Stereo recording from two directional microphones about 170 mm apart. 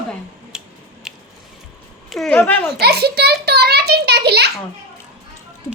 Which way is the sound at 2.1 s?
5° left (ahead or behind).